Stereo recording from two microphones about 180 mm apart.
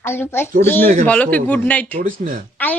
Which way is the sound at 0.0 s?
15° left (ahead or behind).